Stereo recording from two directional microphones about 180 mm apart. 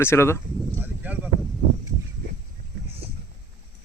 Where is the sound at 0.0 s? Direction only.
15° left (ahead or behind).